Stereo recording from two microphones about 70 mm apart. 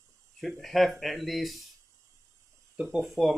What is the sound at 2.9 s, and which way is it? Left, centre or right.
Speech, centre.